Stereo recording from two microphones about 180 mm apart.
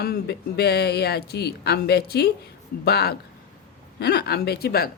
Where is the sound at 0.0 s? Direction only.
60° left (ahead or behind).